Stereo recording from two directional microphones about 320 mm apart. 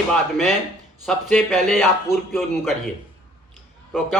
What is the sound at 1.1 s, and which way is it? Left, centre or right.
A man's voice, centre.